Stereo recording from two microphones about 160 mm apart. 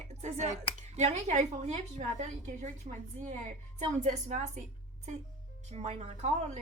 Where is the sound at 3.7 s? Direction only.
50° right (ahead or behind).